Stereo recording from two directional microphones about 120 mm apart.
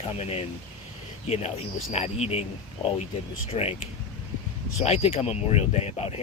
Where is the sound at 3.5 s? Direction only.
55° left (ahead or behind).